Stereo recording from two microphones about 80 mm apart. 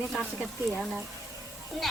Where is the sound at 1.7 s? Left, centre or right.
Centre.